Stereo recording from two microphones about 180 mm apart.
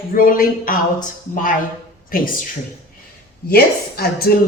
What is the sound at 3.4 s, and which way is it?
Speech, 60° left (ahead or behind).